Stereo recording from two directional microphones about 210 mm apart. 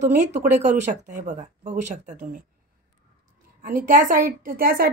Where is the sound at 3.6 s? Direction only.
40° right (ahead or behind).